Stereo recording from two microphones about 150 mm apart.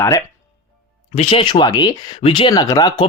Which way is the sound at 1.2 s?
35° left (ahead or behind).